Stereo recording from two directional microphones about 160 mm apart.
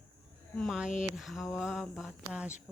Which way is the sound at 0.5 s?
Centre (ahead or behind).